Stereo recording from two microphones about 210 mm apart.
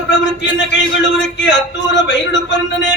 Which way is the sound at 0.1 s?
55° left (ahead or behind).